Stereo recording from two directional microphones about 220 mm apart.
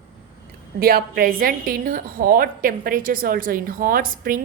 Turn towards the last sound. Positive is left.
turn(degrees=-40)  # may be behind; listen again after turning